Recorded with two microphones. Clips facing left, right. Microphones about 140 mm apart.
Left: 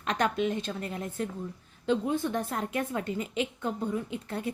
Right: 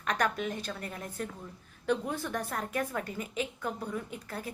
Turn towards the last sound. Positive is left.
turn(degrees=25)  # may be behind; listen again after turning